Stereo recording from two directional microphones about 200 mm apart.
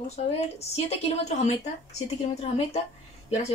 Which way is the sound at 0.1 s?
30° left (ahead or behind).